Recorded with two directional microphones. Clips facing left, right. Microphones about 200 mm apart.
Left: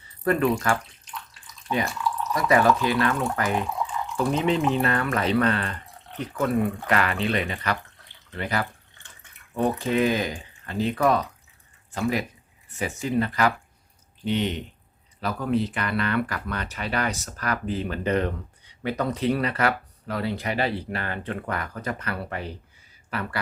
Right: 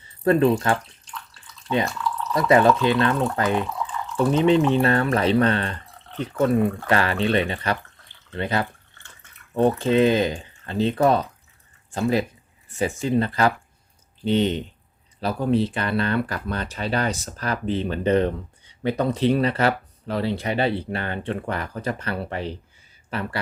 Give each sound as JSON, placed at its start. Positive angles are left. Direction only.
{"t": 0.3, "sound": "speech", "side_deg": -30}
{"t": 1.3, "sound": "water", "side_deg": 15}
{"t": 2.3, "sound": "speech", "side_deg": -25}